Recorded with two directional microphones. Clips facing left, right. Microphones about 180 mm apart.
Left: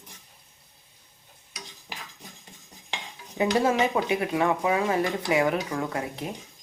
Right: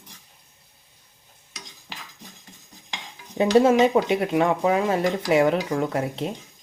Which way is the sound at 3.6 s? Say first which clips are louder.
Right 6 dB; 25° right (ahead or behind).